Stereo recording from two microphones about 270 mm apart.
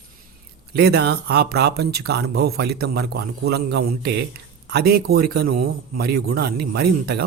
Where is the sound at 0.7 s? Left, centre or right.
Right.